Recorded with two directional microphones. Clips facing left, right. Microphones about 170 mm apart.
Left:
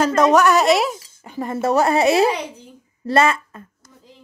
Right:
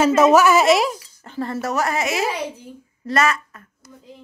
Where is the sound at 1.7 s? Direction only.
30° left (ahead or behind).